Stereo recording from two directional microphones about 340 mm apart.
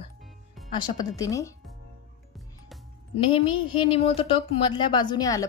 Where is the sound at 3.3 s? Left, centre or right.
Centre.